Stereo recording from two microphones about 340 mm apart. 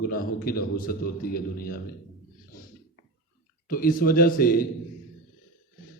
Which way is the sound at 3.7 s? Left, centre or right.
Left.